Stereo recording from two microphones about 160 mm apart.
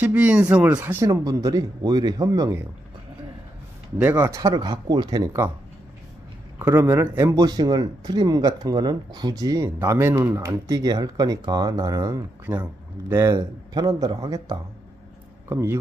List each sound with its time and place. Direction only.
0.0 s speech: 10° right (ahead or behind)
4.0 s speech: 15° right (ahead or behind)
6.6 s speech: 15° right (ahead or behind)